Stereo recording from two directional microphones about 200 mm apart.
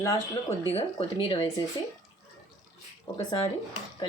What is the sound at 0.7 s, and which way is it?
Speech, 30° left (ahead or behind).